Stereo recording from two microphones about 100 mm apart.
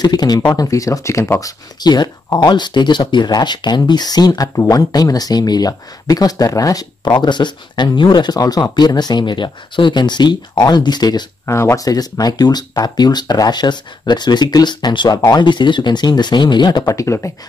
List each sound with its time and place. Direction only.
0.0 s speech: 40° left (ahead or behind)
1.8 s speech: 45° left (ahead or behind)
11.4 s speech: 30° left (ahead or behind)